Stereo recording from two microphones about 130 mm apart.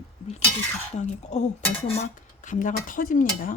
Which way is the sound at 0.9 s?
65° left (ahead or behind).